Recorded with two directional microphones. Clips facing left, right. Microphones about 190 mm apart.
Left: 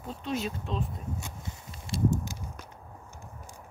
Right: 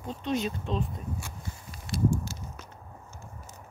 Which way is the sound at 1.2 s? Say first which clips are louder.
Even; 25° left (ahead or behind).